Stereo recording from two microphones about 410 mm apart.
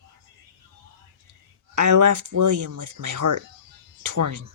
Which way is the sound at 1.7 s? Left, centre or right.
Right.